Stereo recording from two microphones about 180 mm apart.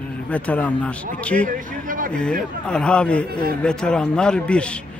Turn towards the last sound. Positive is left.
turn(degrees=5)  # may be behind; listen again after turning